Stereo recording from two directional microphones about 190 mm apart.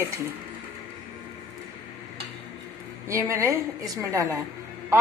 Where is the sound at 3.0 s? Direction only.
15° right (ahead or behind).